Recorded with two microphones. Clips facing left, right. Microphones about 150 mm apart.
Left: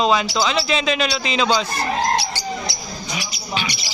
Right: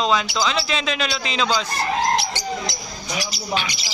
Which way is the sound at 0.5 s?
5° left (ahead or behind).